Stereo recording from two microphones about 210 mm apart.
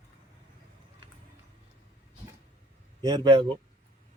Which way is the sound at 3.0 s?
20° right (ahead or behind).